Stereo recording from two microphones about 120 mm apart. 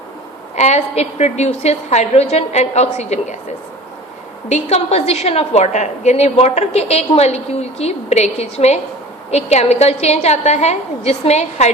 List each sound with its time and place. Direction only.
0.5 s a woman's voice: 70° left (ahead or behind)
4.4 s a woman's voice: 65° left (ahead or behind)